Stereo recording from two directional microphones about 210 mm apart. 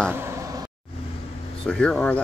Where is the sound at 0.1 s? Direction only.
15° right (ahead or behind).